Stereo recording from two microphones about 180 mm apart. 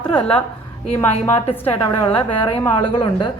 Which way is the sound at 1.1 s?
35° left (ahead or behind).